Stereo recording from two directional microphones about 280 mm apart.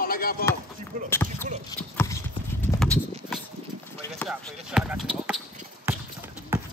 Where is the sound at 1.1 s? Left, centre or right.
Centre.